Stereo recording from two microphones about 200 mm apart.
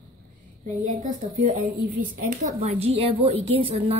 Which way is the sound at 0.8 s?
40° right (ahead or behind).